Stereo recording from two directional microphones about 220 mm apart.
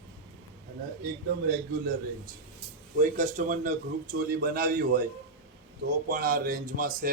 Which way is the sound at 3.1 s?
35° right (ahead or behind).